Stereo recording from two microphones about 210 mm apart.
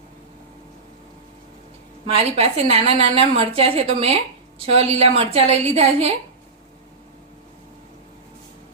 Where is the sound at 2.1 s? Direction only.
30° right (ahead or behind).